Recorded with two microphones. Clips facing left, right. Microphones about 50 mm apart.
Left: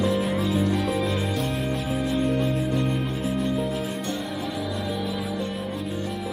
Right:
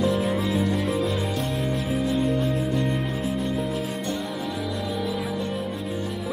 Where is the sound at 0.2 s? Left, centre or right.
Centre.